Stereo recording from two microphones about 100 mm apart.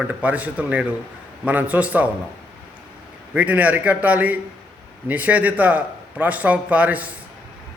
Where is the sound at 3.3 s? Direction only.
15° right (ahead or behind).